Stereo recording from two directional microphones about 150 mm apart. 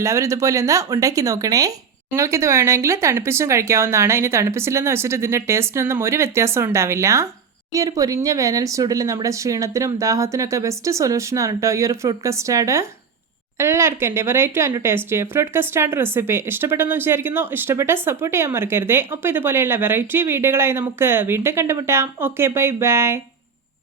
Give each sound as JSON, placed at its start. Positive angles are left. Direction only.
{"t": 0.0, "sound": "speech", "side_deg": -20}